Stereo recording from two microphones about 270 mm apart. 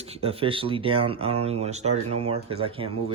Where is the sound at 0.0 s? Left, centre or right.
Right.